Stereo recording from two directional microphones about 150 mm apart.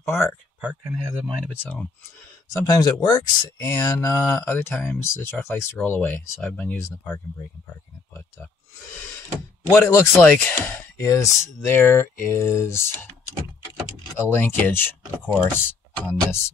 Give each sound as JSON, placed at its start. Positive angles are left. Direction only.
{"t": 0.0, "sound": "speech", "side_deg": 20}
{"t": 0.6, "sound": "speech", "side_deg": -10}
{"t": 1.5, "sound": "speech", "side_deg": 10}
{"t": 2.5, "sound": "speech", "side_deg": 25}
{"t": 9.7, "sound": "speech", "side_deg": 15}
{"t": 14.1, "sound": "speech", "side_deg": 15}